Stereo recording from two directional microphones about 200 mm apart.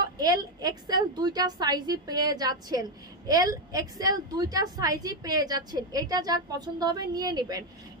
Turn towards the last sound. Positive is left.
turn(degrees=-20)  # may be behind; listen again after turning